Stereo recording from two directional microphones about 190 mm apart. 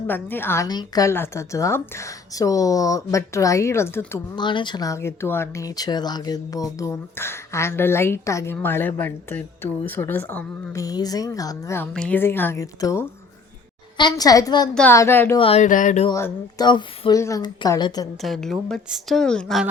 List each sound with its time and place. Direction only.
0.1 s speech: 10° left (ahead or behind)
4.4 s a woman's voice: 25° left (ahead or behind)
15.4 s a woman's voice: 30° left (ahead or behind)
15.6 s speech: 40° left (ahead or behind)
16.0 s a woman's voice: 20° left (ahead or behind)
18.2 s a woman's voice: centre (ahead or behind)